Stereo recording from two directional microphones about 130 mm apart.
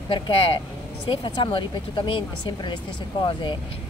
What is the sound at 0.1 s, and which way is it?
Speech, 45° left (ahead or behind).